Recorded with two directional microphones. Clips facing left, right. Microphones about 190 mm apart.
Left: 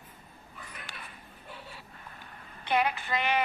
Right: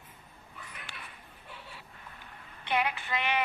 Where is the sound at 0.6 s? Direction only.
40° left (ahead or behind).